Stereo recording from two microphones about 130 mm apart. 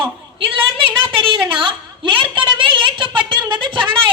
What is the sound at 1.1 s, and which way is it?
A woman's voice, 40° right (ahead or behind).